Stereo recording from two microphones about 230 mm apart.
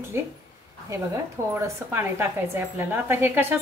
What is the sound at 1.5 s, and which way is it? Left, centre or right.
A woman's voice, centre.